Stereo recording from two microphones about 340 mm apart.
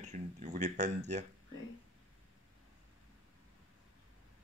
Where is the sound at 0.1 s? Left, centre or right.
Right.